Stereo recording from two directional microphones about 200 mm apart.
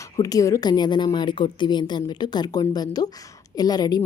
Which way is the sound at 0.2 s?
15° left (ahead or behind).